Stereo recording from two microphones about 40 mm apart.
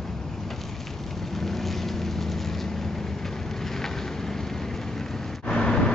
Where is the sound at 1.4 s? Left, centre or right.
Centre.